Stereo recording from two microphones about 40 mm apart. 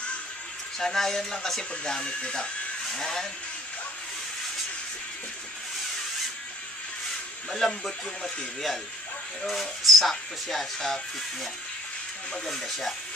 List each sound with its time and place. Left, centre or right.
0.7 s speech: centre
7.6 s speech: centre
9.5 s speech: centre
12.4 s speech: centre